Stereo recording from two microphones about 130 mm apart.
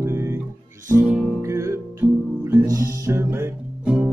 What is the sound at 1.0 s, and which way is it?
Music, 5° right (ahead or behind).